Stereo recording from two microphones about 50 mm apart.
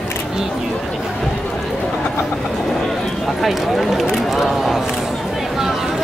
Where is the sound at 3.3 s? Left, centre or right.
Centre.